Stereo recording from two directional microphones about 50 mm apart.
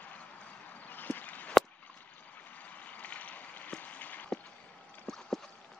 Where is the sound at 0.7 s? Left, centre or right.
Left.